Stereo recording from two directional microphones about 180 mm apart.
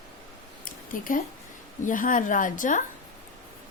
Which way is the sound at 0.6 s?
50° left (ahead or behind).